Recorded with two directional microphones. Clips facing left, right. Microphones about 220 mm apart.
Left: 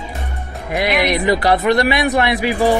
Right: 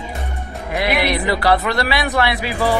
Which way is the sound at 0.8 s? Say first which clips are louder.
Left 2 dB; 20° left (ahead or behind).